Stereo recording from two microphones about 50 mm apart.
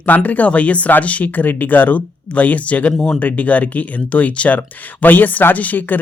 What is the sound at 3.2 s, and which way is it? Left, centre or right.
Speech, left.